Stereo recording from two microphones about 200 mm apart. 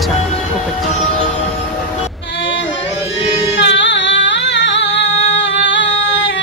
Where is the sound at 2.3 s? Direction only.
65° left (ahead or behind).